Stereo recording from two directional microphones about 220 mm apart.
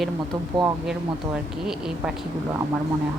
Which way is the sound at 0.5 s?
20° right (ahead or behind).